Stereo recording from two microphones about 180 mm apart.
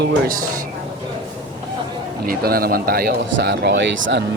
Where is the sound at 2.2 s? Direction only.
55° right (ahead or behind).